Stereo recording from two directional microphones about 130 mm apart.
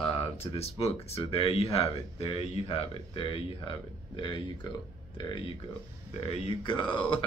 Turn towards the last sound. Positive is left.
turn(degrees=40)  # may be behind; listen again after turning